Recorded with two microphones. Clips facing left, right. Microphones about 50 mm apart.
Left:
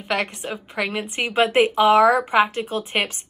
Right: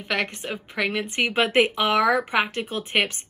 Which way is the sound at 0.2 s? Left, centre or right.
Right.